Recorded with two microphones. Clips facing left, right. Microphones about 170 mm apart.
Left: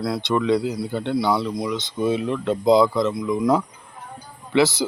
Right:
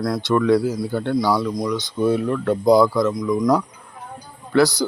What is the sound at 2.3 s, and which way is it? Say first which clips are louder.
Speech: right 2 dB; 20° left (ahead or behind).